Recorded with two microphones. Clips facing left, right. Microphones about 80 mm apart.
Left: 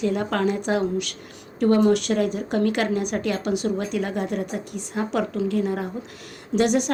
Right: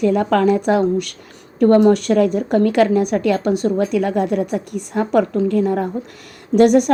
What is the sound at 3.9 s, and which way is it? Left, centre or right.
A woman's voice, right.